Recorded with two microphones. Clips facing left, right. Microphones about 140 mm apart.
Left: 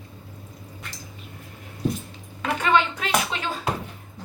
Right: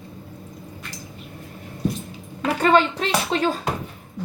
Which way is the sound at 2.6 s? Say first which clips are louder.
Right 4 dB; 40° right (ahead or behind).